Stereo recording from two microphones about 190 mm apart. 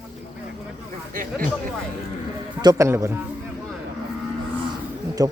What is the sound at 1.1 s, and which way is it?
Chatter, 45° right (ahead or behind).